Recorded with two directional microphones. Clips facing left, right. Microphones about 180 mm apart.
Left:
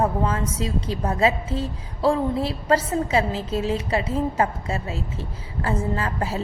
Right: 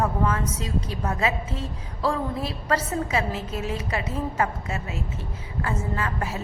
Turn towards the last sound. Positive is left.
turn(degrees=30)  # may be behind; listen again after turning